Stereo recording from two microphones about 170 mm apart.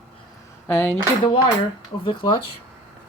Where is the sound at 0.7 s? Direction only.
15° left (ahead or behind).